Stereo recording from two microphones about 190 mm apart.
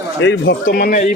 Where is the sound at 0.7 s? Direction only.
50° left (ahead or behind).